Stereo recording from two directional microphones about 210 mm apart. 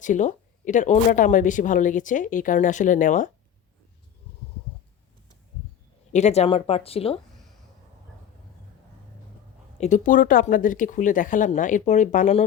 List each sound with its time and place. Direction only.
0.0 s speech: 35° left (ahead or behind)
6.1 s speech: 30° left (ahead or behind)
9.8 s speech: 35° left (ahead or behind)